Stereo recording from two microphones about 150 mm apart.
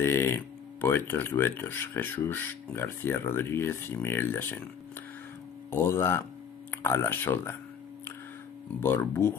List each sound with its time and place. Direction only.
0.0 s speech: 15° left (ahead or behind)
5.7 s speech: 15° left (ahead or behind)
8.8 s speech: 15° left (ahead or behind)